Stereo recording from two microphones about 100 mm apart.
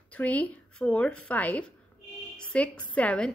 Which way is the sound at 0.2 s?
15° left (ahead or behind).